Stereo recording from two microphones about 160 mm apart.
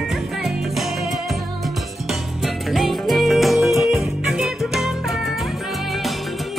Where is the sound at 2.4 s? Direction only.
Centre (ahead or behind).